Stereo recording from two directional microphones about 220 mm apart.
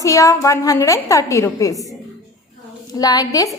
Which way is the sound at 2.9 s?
15° left (ahead or behind).